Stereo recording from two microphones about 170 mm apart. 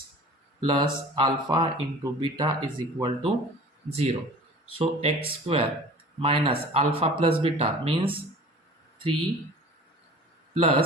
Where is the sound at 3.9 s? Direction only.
40° right (ahead or behind).